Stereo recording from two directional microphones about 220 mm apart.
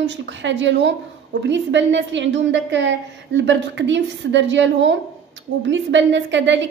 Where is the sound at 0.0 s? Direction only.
55° right (ahead or behind).